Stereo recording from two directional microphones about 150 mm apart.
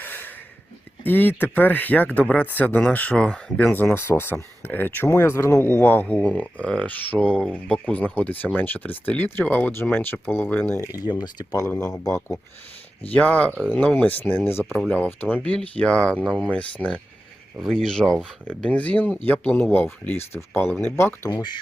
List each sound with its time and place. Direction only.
0.0 s snort: 10° left (ahead or behind)
1.0 s speech: 10° left (ahead or behind)
11.7 s speech: 5° left (ahead or behind)
11.9 s speech: 20° left (ahead or behind)